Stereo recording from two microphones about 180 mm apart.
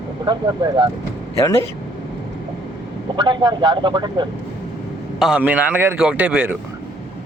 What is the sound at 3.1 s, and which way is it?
A man's voice, 25° right (ahead or behind).